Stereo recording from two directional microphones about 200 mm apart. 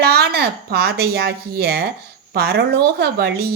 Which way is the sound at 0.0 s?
50° right (ahead or behind).